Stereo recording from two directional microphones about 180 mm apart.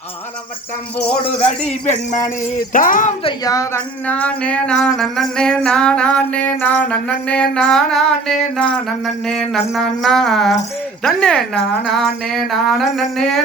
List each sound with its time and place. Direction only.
0.9 s speech: 5° left (ahead or behind)
1.2 s speech: 35° left (ahead or behind)
3.2 s a sound: 20° left (ahead or behind); by 13.4 s centre (ahead or behind)